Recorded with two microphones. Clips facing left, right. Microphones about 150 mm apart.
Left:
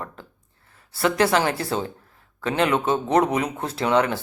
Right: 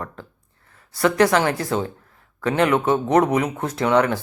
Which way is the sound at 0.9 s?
30° left (ahead or behind).